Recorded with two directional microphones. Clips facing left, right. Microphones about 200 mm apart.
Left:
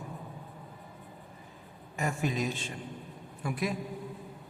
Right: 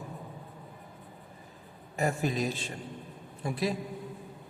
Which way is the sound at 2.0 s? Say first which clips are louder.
Right 2 dB; 35° right (ahead or behind).